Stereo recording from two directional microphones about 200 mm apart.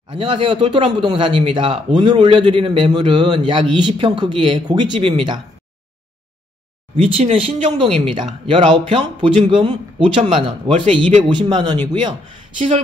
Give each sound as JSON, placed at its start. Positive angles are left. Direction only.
{"t": 0.1, "sound": "speech", "side_deg": -25}
{"t": 7.0, "sound": "speech", "side_deg": -25}